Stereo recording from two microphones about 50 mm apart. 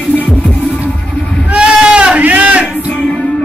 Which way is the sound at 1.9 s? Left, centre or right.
Right.